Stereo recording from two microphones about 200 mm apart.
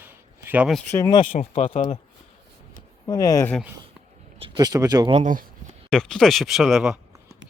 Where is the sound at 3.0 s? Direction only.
20° left (ahead or behind).